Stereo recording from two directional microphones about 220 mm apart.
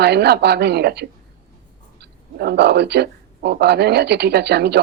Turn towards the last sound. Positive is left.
turn(degrees=-50)  # may be behind; listen again after turning